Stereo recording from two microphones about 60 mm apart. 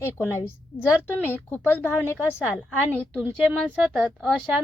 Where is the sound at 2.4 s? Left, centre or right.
Centre.